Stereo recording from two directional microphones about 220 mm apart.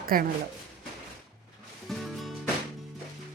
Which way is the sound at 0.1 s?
40° right (ahead or behind).